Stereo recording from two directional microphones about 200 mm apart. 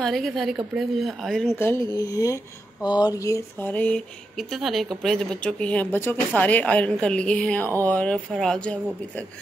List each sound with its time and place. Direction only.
0.0 s speech: centre (ahead or behind)
1.5 s speech: 15° left (ahead or behind)